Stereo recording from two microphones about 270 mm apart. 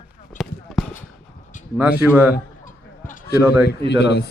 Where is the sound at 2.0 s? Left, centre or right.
Centre.